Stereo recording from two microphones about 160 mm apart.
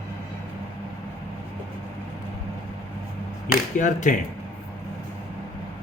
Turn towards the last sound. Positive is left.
turn(degrees=50)  # may be behind; listen again after turning